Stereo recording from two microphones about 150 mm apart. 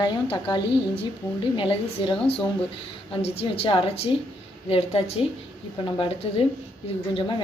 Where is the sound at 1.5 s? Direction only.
35° left (ahead or behind).